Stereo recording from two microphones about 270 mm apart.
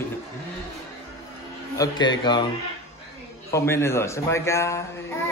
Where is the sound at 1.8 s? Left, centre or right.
Centre.